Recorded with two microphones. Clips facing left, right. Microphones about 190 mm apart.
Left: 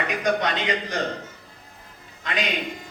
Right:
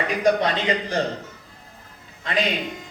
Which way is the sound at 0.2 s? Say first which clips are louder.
Right 5 dB; 30° right (ahead or behind).